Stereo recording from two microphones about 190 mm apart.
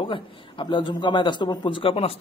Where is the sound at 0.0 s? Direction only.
25° left (ahead or behind).